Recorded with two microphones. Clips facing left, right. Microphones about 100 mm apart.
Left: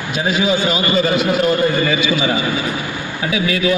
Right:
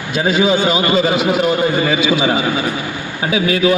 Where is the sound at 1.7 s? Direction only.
20° right (ahead or behind).